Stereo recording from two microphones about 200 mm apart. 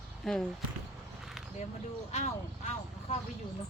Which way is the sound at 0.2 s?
Centre (ahead or behind).